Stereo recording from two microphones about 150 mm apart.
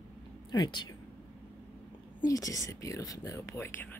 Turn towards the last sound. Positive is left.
turn(degrees=15)  # may be behind; listen again after turning